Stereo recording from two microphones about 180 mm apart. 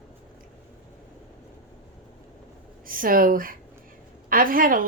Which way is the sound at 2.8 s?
50° right (ahead or behind).